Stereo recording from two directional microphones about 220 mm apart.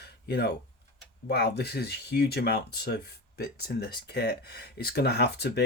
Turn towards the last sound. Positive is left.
turn(degrees=50)  # may be behind; listen again after turning